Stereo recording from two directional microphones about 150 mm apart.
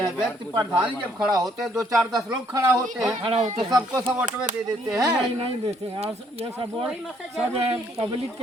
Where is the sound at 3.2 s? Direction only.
35° right (ahead or behind).